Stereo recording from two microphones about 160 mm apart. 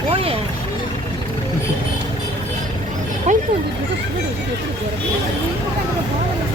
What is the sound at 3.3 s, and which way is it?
Speech, 45° right (ahead or behind).